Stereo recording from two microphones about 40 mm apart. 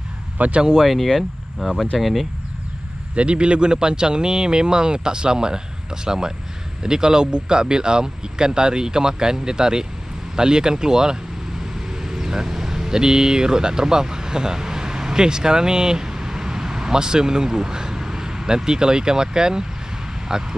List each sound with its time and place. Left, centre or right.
0.4 s speech: right
0.8 s speech: centre
3.2 s speech: right